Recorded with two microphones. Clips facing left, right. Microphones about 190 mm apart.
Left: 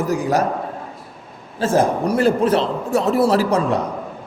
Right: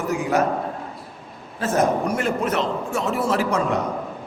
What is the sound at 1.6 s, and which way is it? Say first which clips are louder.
A man's voice: left 3 dB; 30° left (ahead or behind).